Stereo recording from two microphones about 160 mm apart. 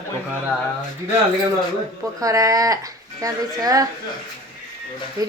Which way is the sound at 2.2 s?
20° right (ahead or behind).